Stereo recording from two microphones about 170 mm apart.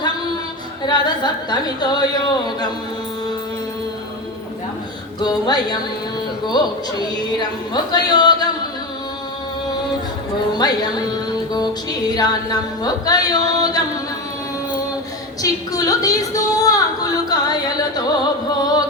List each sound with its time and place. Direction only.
0.9 s a woman's voice: 25° left (ahead or behind)
5.2 s a woman's voice: 25° left (ahead or behind)
10.5 s a woman's voice: 25° left (ahead or behind)
12.0 s a woman's voice: 25° left (ahead or behind)
15.4 s a woman's voice: 20° left (ahead or behind)